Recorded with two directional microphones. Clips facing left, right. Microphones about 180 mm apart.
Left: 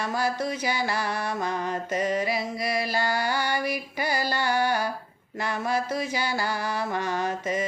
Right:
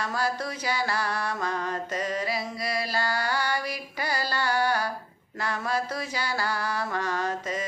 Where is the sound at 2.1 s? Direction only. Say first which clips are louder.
Left 3 dB; 20° left (ahead or behind).